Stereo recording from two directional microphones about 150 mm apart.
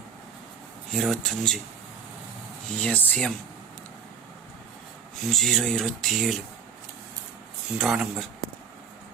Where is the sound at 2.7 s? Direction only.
10° left (ahead or behind).